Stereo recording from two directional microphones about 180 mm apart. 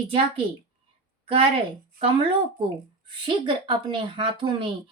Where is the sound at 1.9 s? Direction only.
30° right (ahead or behind).